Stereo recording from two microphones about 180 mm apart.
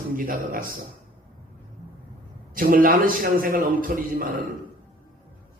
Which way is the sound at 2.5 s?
50° right (ahead or behind).